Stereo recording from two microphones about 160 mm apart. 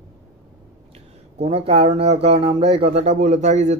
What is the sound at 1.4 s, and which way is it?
Speech, 40° right (ahead or behind).